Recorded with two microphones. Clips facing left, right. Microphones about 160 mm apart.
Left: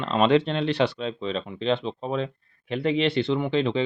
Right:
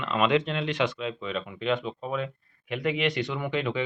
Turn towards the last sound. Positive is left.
turn(degrees=30)  # may be behind; listen again after turning